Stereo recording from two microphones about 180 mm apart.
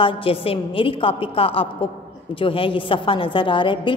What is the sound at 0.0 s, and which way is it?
A woman's voice, 30° left (ahead or behind).